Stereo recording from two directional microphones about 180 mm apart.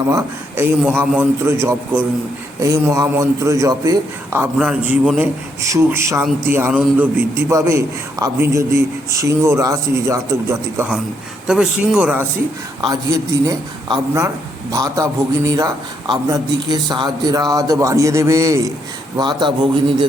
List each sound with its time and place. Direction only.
0.1 s a man's voice: 15° right (ahead or behind)
11.4 s speech: 5° right (ahead or behind)
12.8 s a man's voice: 20° right (ahead or behind)